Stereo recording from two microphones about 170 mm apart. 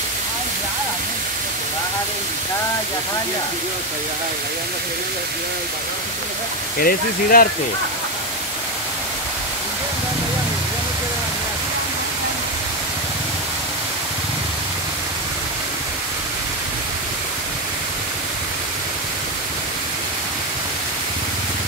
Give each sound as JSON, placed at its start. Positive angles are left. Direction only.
{"t": 6.8, "sound": "speech", "side_deg": 60}